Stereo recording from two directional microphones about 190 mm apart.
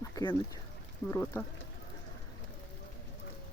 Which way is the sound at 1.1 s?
15° left (ahead or behind).